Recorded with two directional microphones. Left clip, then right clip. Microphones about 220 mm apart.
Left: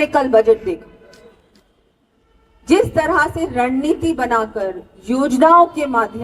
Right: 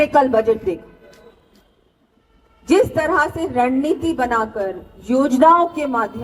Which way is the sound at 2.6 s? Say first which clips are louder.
Left 1 dB; 25° left (ahead or behind).